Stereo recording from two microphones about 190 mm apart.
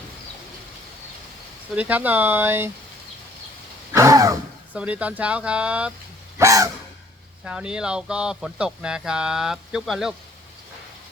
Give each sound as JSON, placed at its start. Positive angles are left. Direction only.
{"t": 1.7, "sound": "speech", "side_deg": -10}
{"t": 3.9, "sound": "speech", "side_deg": -15}
{"t": 4.8, "sound": "speech", "side_deg": -5}
{"t": 6.4, "sound": "speech", "side_deg": -15}
{"t": 7.4, "sound": "speech", "side_deg": -5}